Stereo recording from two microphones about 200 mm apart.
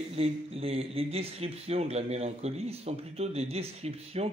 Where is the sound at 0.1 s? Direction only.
30° right (ahead or behind).